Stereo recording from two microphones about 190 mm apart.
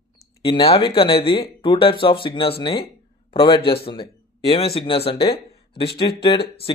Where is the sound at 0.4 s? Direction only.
30° left (ahead or behind).